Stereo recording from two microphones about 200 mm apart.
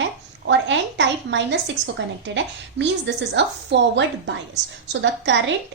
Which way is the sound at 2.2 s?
65° right (ahead or behind).